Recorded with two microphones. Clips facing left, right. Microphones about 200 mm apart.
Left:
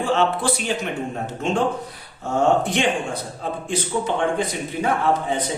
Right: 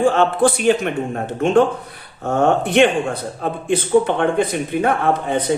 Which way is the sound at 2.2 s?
60° right (ahead or behind).